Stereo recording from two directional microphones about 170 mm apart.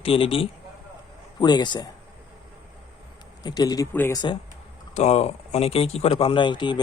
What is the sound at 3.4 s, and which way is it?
Speech, 25° left (ahead or behind).